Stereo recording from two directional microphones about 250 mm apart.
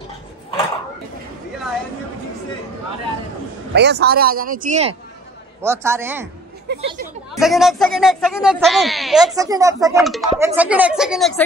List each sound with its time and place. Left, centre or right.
3.7 s speech: right
5.6 s a woman's voice: centre
6.7 s speech: right
7.3 s speech: centre
9.3 s a woman's voice: centre
10.0 s speech: centre